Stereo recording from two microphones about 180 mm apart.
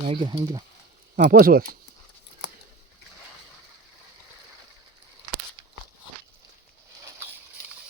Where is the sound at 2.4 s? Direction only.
70° left (ahead or behind).